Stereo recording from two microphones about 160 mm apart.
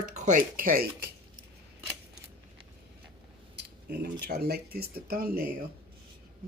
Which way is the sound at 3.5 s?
90° right.